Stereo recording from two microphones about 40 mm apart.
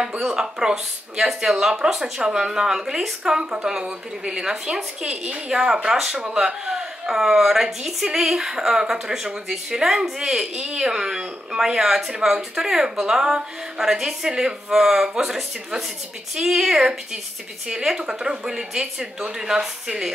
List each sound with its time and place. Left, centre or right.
0.2 s speech: centre